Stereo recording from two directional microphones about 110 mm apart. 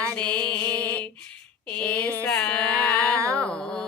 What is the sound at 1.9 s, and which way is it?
Mantra, 10° left (ahead or behind).